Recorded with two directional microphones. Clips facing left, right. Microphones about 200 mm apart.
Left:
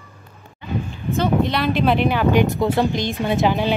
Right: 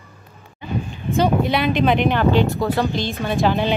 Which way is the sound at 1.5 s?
Centre (ahead or behind).